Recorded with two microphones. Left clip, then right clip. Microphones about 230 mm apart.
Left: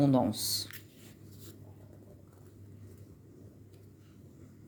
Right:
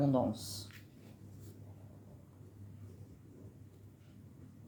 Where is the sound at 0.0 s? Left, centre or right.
Left.